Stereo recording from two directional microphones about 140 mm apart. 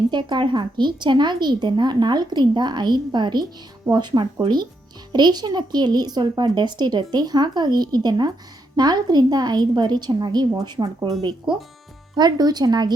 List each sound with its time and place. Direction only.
0.1 s a woman's voice: 35° right (ahead or behind)
12.1 s speech: 30° right (ahead or behind)